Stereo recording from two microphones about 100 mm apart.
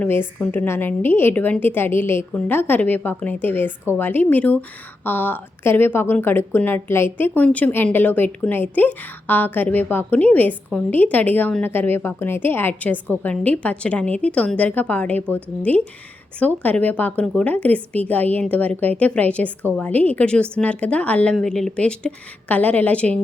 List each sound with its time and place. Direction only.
0.0 s a woman's voice: 20° left (ahead or behind)
16.4 s a woman's voice: 15° left (ahead or behind)